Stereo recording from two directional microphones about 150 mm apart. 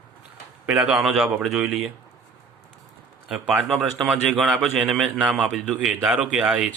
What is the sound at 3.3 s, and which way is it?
A man's voice, 5° right (ahead or behind).